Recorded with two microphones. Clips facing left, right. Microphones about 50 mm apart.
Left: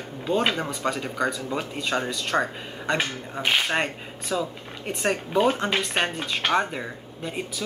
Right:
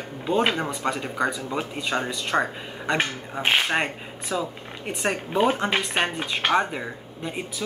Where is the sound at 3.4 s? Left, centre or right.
Right.